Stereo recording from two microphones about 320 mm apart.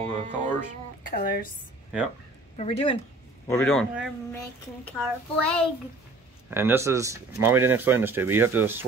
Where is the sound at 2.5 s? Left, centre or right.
Centre.